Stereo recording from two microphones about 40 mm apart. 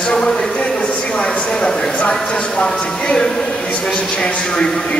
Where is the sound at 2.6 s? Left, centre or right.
Centre.